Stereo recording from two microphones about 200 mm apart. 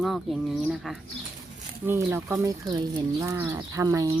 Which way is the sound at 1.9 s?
10° right (ahead or behind).